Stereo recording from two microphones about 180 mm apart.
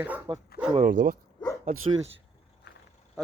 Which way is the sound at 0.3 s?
30° right (ahead or behind).